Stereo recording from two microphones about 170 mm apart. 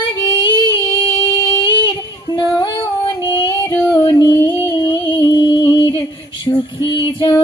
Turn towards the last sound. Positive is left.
turn(degrees=25)  # may be behind; listen again after turning